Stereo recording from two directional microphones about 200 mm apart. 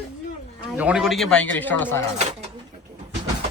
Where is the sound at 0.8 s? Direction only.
5° right (ahead or behind).